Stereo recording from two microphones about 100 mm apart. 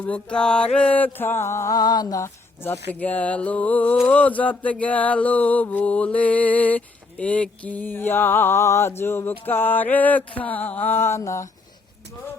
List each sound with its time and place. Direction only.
0.0 s mantra: 10° left (ahead or behind); by 2.3 s 35° left (ahead or behind)
2.6 s mantra: 15° left (ahead or behind)